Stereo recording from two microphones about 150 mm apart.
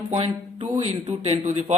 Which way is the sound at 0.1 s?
40° right (ahead or behind).